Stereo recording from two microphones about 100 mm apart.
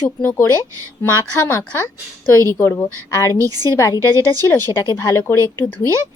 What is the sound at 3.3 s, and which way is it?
Speech, 35° right (ahead or behind).